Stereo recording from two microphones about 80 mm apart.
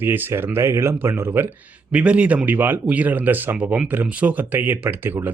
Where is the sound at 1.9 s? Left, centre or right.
Centre.